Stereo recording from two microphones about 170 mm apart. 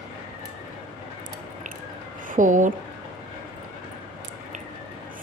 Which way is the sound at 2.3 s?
50° right (ahead or behind).